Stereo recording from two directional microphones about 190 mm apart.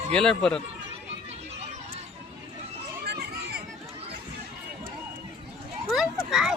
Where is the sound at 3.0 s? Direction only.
60° right (ahead or behind).